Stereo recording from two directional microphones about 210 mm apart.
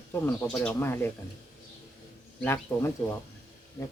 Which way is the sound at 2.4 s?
10° left (ahead or behind).